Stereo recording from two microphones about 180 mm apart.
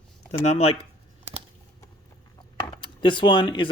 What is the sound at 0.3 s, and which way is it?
Speech, 40° left (ahead or behind).